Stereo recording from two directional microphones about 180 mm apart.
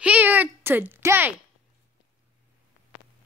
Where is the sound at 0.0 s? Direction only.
10° right (ahead or behind).